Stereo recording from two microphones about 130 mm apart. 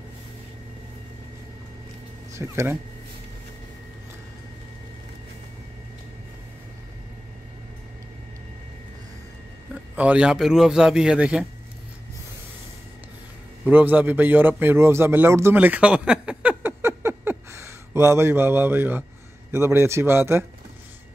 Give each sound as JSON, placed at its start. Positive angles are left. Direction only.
{"t": 2.3, "sound": "a man's voice", "side_deg": -20}
{"t": 9.9, "sound": "a man's voice", "side_deg": -10}
{"t": 13.7, "sound": "speech", "side_deg": -15}
{"t": 16.6, "sound": "a sound", "side_deg": -20}
{"t": 19.5, "sound": "a man's voice", "side_deg": -20}